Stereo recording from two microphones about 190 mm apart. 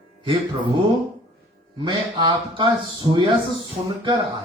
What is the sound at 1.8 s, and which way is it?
A man's voice, 25° right (ahead or behind).